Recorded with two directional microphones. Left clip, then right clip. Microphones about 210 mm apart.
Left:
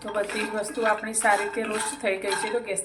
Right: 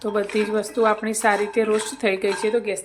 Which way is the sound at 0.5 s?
55° right (ahead or behind).